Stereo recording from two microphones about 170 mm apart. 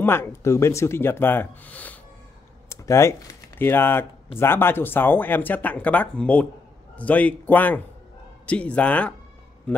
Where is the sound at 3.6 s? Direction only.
10° left (ahead or behind).